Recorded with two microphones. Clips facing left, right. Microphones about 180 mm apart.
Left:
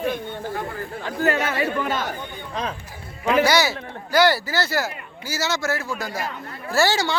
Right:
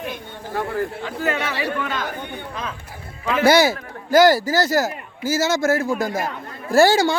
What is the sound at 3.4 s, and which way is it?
A man's voice, 50° right (ahead or behind).